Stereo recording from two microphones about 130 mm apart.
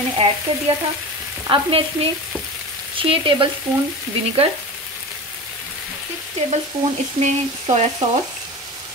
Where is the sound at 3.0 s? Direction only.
40° right (ahead or behind).